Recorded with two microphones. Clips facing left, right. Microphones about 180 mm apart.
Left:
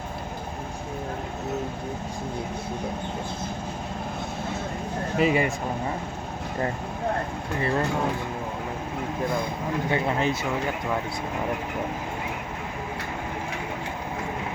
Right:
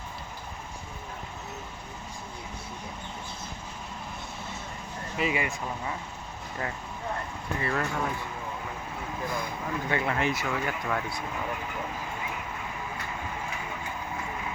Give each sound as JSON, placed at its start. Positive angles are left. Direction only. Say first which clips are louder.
{"t": 5.1, "sound": "speech", "louder": "left 7 dB", "side_deg": 40}
{"t": 7.6, "sound": "speech", "louder": "left 5 dB", "side_deg": 30}
{"t": 9.9, "sound": "speech", "louder": "left 3 dB", "side_deg": 25}